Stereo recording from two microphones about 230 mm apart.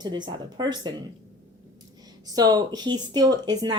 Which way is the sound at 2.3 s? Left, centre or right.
Centre.